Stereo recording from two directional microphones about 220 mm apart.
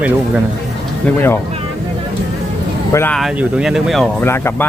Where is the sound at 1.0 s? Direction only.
10° left (ahead or behind).